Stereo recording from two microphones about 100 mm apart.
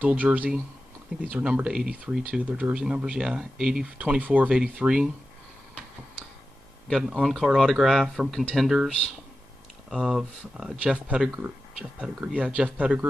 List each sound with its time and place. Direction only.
0.0 s speech: 15° right (ahead or behind)
6.9 s speech: 5° right (ahead or behind)